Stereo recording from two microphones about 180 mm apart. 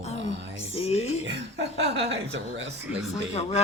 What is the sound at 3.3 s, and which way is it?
Speech, 35° left (ahead or behind).